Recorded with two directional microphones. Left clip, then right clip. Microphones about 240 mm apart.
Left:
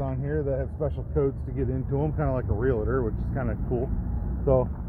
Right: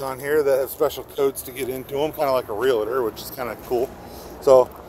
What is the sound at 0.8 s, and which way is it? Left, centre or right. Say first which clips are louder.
Speech: right 6 dB; right.